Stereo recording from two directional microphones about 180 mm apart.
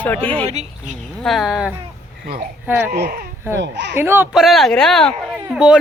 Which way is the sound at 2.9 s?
55° right (ahead or behind).